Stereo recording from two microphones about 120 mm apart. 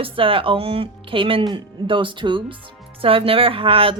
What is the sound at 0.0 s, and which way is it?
A woman's voice, 50° right (ahead or behind).